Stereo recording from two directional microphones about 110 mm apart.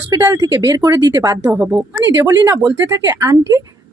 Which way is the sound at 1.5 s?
20° right (ahead or behind).